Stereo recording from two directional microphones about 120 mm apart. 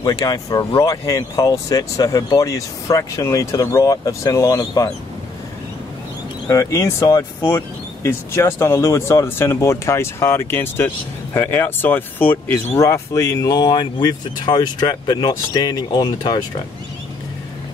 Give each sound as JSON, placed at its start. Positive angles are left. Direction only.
{"t": 0.0, "sound": "speech", "side_deg": 35}
{"t": 6.5, "sound": "speech", "side_deg": 25}